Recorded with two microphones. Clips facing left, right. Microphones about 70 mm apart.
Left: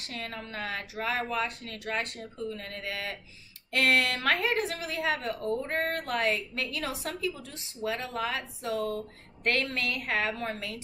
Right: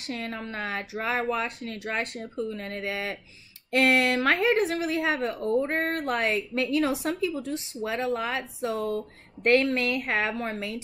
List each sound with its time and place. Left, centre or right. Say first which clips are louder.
0.1 s a woman's voice: right 5 dB; right